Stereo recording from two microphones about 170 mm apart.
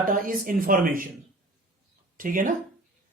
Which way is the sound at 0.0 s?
55° right (ahead or behind).